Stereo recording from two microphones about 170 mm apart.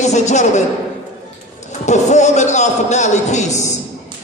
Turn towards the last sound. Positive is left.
turn(degrees=45)  # may be behind; listen again after turning